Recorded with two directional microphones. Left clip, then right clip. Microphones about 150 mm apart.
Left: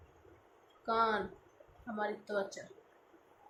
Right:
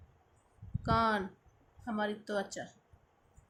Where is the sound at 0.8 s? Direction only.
55° right (ahead or behind).